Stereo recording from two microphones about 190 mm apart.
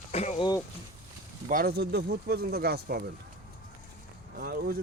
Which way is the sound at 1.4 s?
50° right (ahead or behind).